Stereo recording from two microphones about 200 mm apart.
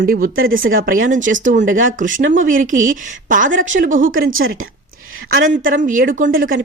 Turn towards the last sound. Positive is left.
turn(degrees=-45)  # may be behind; listen again after turning